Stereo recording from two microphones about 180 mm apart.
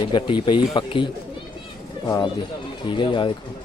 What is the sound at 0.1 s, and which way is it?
Speech, 25° left (ahead or behind).